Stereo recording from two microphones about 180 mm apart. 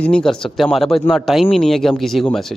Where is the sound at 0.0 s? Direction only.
5° left (ahead or behind).